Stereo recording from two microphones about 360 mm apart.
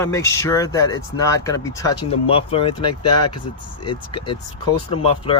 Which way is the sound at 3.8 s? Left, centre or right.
Centre.